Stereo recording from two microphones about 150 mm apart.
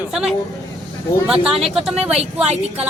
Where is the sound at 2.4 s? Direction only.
45° right (ahead or behind).